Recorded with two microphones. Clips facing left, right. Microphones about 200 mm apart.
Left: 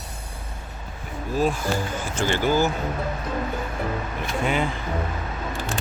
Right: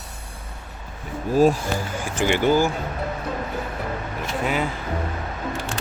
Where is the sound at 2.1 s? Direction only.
15° right (ahead or behind).